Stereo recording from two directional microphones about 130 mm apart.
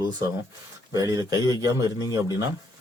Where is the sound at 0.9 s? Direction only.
30° right (ahead or behind).